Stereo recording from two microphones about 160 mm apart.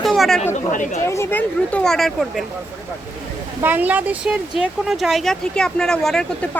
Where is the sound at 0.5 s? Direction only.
50° left (ahead or behind).